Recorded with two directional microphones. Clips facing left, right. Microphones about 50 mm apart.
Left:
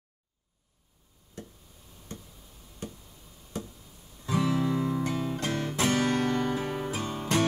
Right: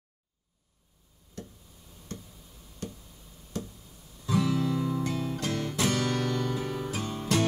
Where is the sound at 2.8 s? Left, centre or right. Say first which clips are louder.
Right 1 dB; centre.